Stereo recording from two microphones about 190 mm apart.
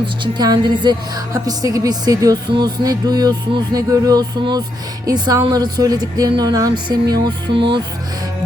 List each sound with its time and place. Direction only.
0.0 s a woman's voice: 20° right (ahead or behind)